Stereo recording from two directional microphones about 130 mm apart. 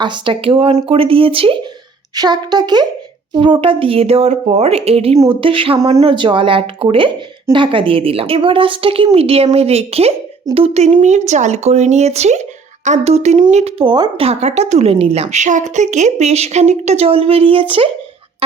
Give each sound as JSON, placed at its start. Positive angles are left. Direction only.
{"t": 0.0, "sound": "speech", "side_deg": -40}
{"t": 2.1, "sound": "a woman's voice", "side_deg": -30}
{"t": 13.8, "sound": "speech", "side_deg": -35}
{"t": 14.2, "sound": "a woman's voice", "side_deg": -55}